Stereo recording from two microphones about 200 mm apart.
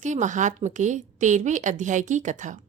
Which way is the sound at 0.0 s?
35° right (ahead or behind).